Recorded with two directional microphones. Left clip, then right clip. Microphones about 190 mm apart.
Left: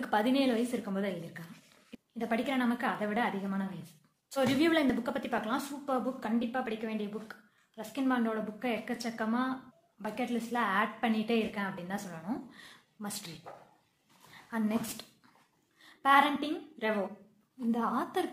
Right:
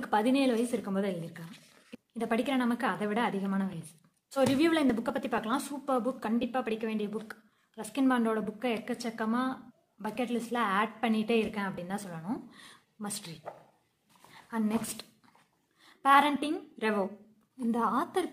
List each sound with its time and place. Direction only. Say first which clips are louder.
0.0 s a woman's voice: right 1 dB; 25° right (ahead or behind)
14.5 s a woman's voice: right 1 dB; 25° right (ahead or behind)